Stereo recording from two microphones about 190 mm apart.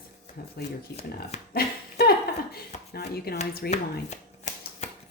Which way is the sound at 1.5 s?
55° left (ahead or behind).